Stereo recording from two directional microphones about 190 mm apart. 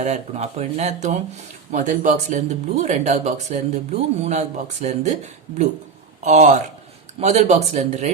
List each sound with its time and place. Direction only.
0.0 s speech: 35° right (ahead or behind)